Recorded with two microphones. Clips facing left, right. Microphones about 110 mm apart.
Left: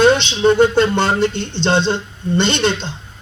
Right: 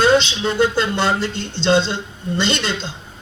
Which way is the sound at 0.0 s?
60° left (ahead or behind).